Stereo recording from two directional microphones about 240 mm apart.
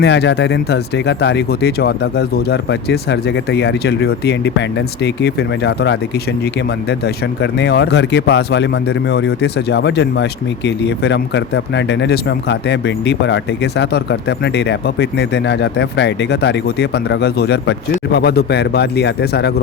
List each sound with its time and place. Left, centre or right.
0.0 s speech: left
7.0 s speech: left